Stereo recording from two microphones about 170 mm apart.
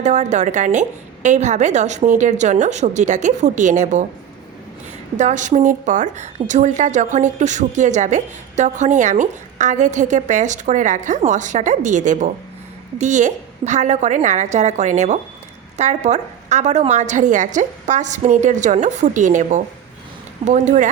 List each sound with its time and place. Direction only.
0.0 s a woman's voice: 45° right (ahead or behind)
5.1 s a woman's voice: 45° right (ahead or behind)